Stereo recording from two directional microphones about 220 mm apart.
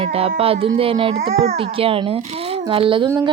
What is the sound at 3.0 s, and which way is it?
Music, 10° right (ahead or behind).